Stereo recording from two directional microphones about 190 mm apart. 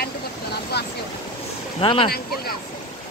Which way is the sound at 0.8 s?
60° left (ahead or behind).